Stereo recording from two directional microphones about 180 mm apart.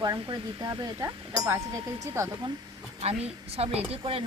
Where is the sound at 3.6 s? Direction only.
35° right (ahead or behind).